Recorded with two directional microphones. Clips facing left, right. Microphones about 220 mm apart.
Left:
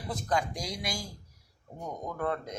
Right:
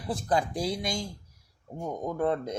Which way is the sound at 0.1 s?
30° right (ahead or behind).